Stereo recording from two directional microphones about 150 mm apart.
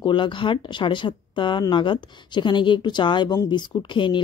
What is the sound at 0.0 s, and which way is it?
Speech, 35° left (ahead or behind).